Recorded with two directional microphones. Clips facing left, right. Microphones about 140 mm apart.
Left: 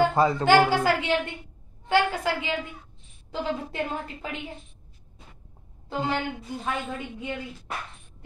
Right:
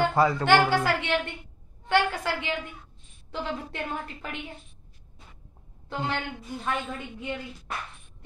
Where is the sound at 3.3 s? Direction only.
35° left (ahead or behind).